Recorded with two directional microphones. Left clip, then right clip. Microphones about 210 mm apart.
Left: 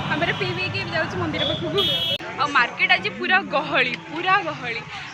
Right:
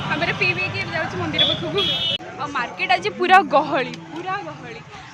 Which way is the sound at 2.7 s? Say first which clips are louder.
Even; 30° right (ahead or behind).